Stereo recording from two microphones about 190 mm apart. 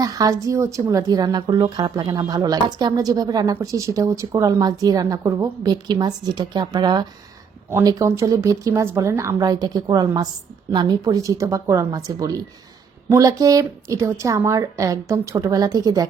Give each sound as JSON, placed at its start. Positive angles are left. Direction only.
{"t": 0.0, "sound": "a woman's voice", "side_deg": -20}